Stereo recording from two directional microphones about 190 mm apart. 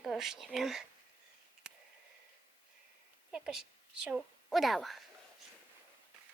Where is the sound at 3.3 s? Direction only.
5° right (ahead or behind).